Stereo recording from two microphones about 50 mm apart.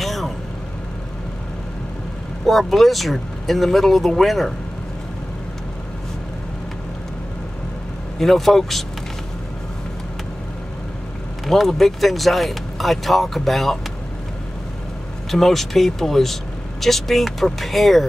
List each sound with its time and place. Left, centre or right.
0.0 s vehicle: centre
2.4 s speech: centre
8.2 s speech: centre
11.4 s speech: centre
15.3 s speech: centre